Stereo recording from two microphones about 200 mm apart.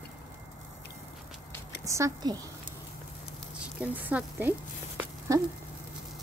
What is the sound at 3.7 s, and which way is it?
Speech, 5° right (ahead or behind).